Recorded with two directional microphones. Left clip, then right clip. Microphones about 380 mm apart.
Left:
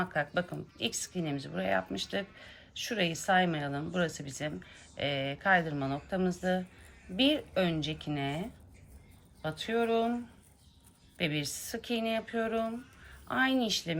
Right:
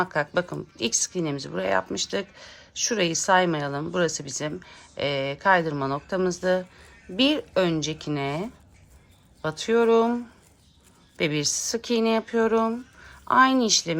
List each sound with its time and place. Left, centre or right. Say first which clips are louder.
0.0 s speech: right 7 dB; centre
11.2 s speech: right 9 dB; centre